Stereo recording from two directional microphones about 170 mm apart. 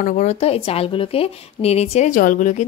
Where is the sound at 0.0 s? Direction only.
45° left (ahead or behind).